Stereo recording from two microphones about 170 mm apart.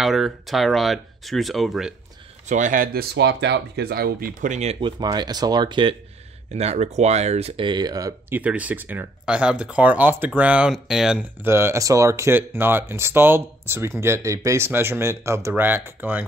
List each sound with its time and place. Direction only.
0.0 s speech: centre (ahead or behind)
2.4 s speech: 45° right (ahead or behind)
4.7 s speech: 25° right (ahead or behind)
6.5 s speech: 40° right (ahead or behind); by 8.4 s 20° right (ahead or behind)
8.4 s speech: 10° right (ahead or behind)
11.4 s speech: 15° right (ahead or behind)